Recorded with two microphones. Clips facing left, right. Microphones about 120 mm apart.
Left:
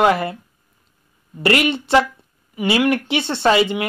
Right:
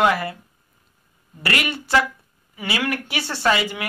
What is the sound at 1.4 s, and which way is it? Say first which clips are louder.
Speech: left 8 dB; 25° left (ahead or behind).